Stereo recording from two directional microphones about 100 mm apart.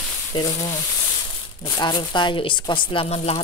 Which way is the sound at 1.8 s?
50° left (ahead or behind).